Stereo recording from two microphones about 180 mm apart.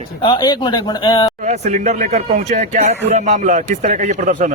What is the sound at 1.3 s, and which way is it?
A man's voice, 40° right (ahead or behind).